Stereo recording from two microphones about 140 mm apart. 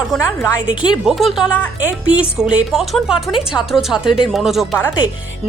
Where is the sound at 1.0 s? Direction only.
5° right (ahead or behind).